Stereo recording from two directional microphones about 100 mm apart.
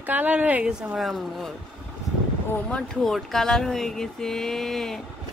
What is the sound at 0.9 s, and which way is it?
Speech, centre (ahead or behind).